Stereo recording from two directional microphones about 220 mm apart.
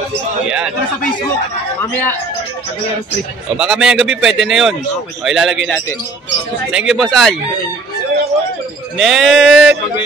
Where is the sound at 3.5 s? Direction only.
Centre (ahead or behind).